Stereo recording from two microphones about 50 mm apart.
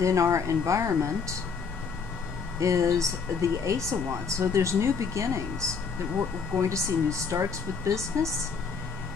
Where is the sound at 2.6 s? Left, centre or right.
Right.